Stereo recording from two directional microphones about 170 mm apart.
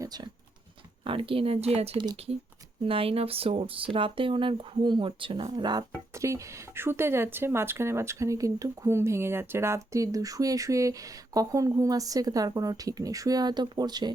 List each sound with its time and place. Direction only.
0.0 s speech: 25° right (ahead or behind)